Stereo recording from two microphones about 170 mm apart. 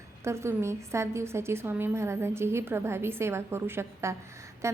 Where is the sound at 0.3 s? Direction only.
15° right (ahead or behind).